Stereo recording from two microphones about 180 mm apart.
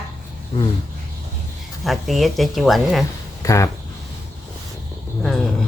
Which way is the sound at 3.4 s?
15° left (ahead or behind).